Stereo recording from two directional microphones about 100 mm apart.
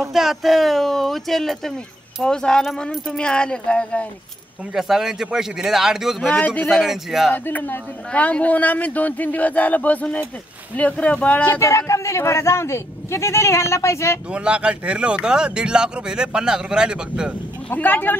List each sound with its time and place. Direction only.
0.0 s speech: centre (ahead or behind)
4.7 s speech: 5° right (ahead or behind)
6.2 s speech: 15° left (ahead or behind)
6.7 s speech: centre (ahead or behind)
7.4 s speech: 20° left (ahead or behind)
11.4 s speech: 25° left (ahead or behind)
14.3 s speech: 10° right (ahead or behind)
17.6 s speech: 15° left (ahead or behind)